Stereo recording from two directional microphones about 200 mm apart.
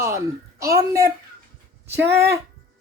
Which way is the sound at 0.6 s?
15° right (ahead or behind).